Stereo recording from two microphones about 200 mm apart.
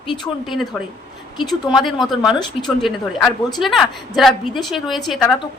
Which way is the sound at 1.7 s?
Centre (ahead or behind).